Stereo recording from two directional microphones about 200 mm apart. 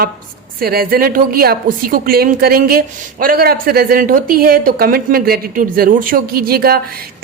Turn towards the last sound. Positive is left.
turn(degrees=-50)  # may be behind; listen again after turning